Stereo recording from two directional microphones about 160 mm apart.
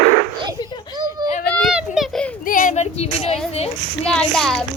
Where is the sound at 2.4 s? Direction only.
55° left (ahead or behind); by 3.4 s 40° left (ahead or behind).